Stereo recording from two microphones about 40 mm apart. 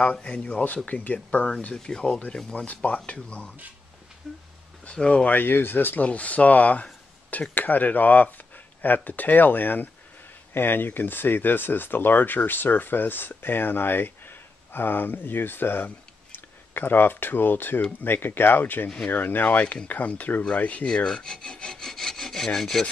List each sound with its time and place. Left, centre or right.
0.0 s speech: left
2.5 s speech: left
4.9 s speech: left
5.3 s speech: left
6.0 s speech: left
10.5 s speech: left
20.8 s sawing: left